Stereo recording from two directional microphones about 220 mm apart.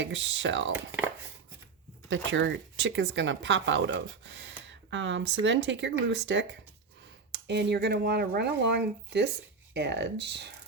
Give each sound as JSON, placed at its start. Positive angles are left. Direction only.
{"t": 0.0, "sound": "speech", "side_deg": -55}
{"t": 2.0, "sound": "speech", "side_deg": -55}